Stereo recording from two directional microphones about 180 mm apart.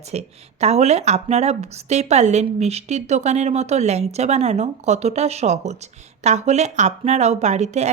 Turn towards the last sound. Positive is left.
turn(degrees=-40)  # may be behind; listen again after turning